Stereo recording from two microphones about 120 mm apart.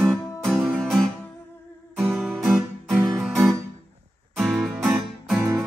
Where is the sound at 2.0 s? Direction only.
Centre (ahead or behind).